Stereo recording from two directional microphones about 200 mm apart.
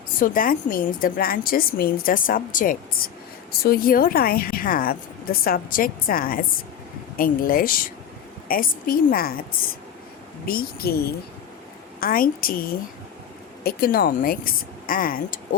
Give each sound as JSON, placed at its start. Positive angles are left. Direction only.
{"t": 0.2, "sound": "a woman's voice", "side_deg": 45}
{"t": 10.4, "sound": "a woman's voice", "side_deg": 50}
{"t": 13.7, "sound": "a woman's voice", "side_deg": 45}